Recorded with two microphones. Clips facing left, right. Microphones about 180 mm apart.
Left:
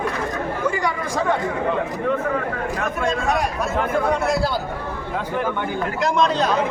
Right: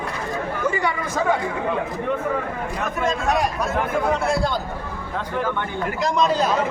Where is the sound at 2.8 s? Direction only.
Centre (ahead or behind).